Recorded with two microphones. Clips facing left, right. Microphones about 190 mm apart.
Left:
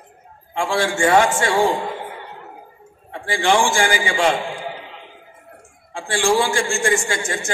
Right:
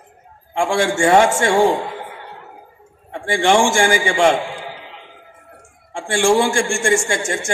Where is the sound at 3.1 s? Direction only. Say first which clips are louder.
Right 3 dB; 25° right (ahead or behind).